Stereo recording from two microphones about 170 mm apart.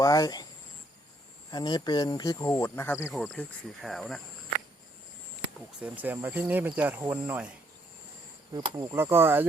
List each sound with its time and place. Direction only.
0.0 s speech: 20° left (ahead or behind)
1.5 s speech: 25° left (ahead or behind)
3.8 s speech: centre (ahead or behind)
5.8 s speech: 10° right (ahead or behind)
8.5 s speech: 25° right (ahead or behind)